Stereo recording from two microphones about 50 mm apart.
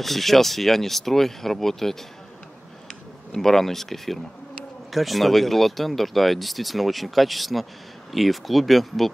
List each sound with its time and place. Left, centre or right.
0.0 s speech: centre